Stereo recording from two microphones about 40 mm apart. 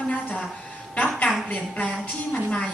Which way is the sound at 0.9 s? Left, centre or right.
Left.